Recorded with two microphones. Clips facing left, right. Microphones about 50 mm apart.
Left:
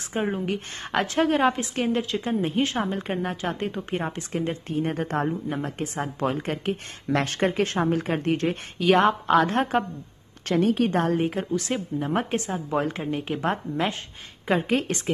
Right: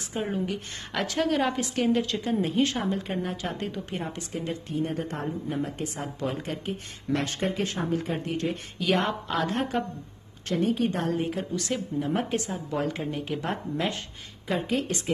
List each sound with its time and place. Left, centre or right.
0.1 s a woman's voice: left
2.0 s a woman's voice: centre
2.2 s a woman's voice: left
2.9 s a woman's voice: left
10.5 s a woman's voice: left
10.9 s a woman's voice: left
11.5 s a woman's voice: left